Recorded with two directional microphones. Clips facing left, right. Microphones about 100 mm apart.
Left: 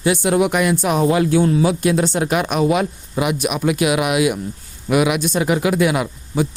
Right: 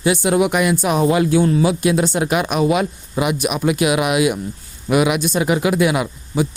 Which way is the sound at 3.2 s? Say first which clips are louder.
Even; 20° right (ahead or behind).